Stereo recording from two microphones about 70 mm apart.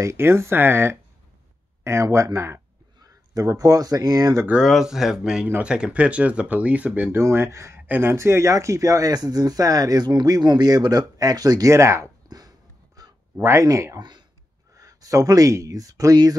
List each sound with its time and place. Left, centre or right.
0.0 s speech: right
3.0 s speech: right
4.6 s speech: centre
7.1 s speech: right
7.8 s speech: right
11.7 s speech: right
12.3 s a sound: right
13.4 s speech: right
13.9 s speech: right
14.7 s speech: right